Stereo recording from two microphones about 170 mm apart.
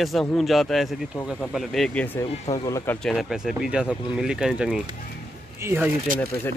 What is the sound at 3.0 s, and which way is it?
Speech, centre (ahead or behind).